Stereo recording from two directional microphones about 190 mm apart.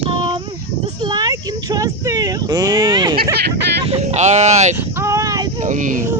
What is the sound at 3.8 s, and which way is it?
Speech, 35° right (ahead or behind).